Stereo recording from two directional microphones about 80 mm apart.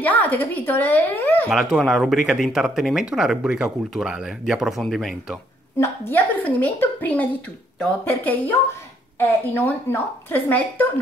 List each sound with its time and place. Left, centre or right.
0.0 s speech: left
1.5 s speech: centre
5.8 s speech: left